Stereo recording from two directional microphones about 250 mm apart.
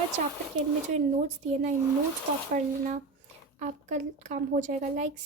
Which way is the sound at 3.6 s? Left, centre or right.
Right.